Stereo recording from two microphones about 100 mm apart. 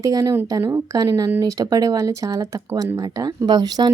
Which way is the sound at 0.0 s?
35° right (ahead or behind).